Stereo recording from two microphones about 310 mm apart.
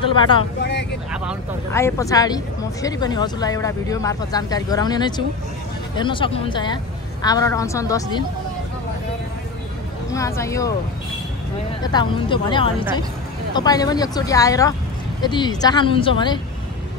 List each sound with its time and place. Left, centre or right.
0.0 s speech: centre
0.6 s vehicle: left
1.7 s speech: centre
10.1 s speech: centre
11.8 s speech: centre